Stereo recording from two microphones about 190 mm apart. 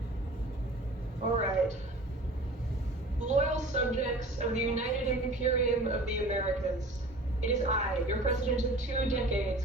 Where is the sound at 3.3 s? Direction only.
40° right (ahead or behind).